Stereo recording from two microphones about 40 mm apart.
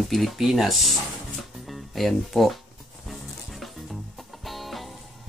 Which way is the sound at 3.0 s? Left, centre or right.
Centre.